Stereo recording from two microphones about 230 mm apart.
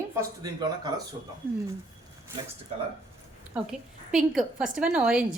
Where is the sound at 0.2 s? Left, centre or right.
Centre.